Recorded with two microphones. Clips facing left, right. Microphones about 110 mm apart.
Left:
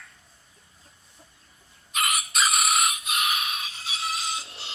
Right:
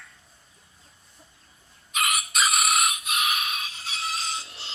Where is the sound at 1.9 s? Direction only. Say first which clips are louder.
Even; centre (ahead or behind).